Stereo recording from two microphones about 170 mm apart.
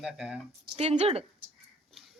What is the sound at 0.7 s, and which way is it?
Speech, 35° right (ahead or behind).